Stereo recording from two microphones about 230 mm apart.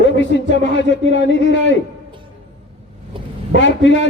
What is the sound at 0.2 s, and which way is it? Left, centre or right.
A man's voice, left.